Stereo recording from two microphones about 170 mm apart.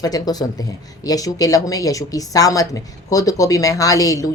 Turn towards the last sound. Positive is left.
turn(degrees=20)  # may be behind; listen again after turning